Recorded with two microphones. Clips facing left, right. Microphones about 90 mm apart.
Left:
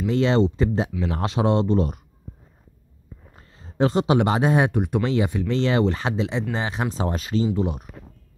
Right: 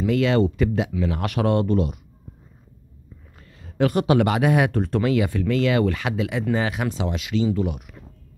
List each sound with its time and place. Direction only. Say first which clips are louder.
0.0 s speech: even; 25° left (ahead or behind)
3.3 s speech: even; 30° left (ahead or behind)
4.7 s speech: even; 15° left (ahead or behind)
5.0 s speech: right 2 dB; 25° left (ahead or behind)